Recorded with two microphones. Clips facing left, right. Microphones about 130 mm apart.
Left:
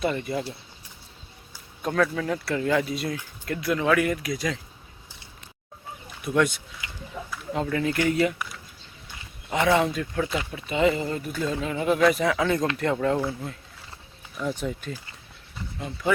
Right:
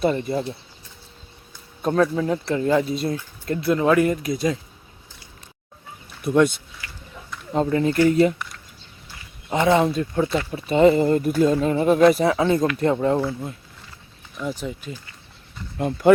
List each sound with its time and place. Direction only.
0.0 s speech: 35° right (ahead or behind)
1.8 s speech: 25° right (ahead or behind)
6.2 s speech: 25° right (ahead or behind)
6.8 s a sound: 20° left (ahead or behind)
7.5 s speech: 30° right (ahead or behind)
8.4 s a sound: 5° left (ahead or behind)
9.5 s speech: 25° right (ahead or behind)
14.3 s speech: centre (ahead or behind)
15.8 s speech: 55° right (ahead or behind)